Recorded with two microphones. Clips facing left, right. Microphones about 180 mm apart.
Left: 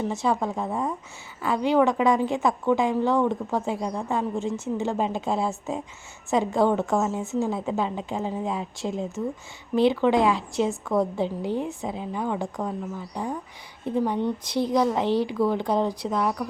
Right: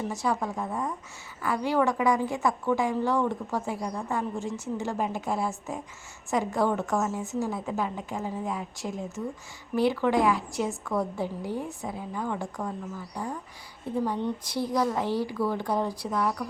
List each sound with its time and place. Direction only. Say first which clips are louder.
0.0 s a woman's voice: left 4 dB; 25° left (ahead or behind)